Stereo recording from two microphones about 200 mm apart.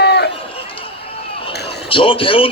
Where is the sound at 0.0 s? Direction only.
55° left (ahead or behind).